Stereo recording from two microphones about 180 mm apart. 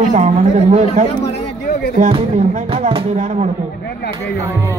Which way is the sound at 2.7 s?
35° right (ahead or behind).